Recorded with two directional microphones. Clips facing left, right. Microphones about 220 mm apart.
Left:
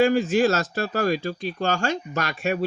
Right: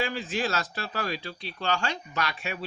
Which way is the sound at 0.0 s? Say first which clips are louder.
Left 11 dB; 45° left (ahead or behind).